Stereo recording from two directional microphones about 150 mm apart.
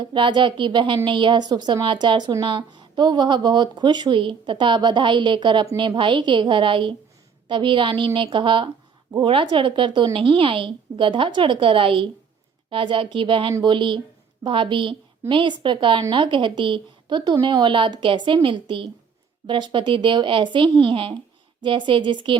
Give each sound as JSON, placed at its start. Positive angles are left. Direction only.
{"t": 0.0, "sound": "speech", "side_deg": -30}